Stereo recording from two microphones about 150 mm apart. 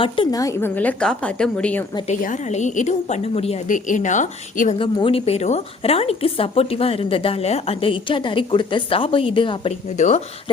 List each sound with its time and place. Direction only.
0.0 s a woman's voice: 30° left (ahead or behind)
0.8 s a woman's voice: 10° left (ahead or behind)
2.0 s a woman's voice: 55° left (ahead or behind)
3.7 s a woman's voice: 60° left (ahead or behind)
4.8 s a woman's voice: 35° left (ahead or behind)
10.0 s a woman's voice: 50° left (ahead or behind)